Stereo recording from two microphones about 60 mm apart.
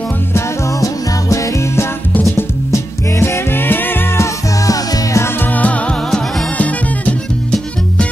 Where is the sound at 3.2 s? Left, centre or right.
Left.